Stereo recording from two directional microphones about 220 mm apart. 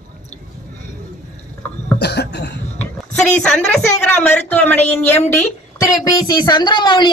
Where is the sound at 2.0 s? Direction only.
50° left (ahead or behind).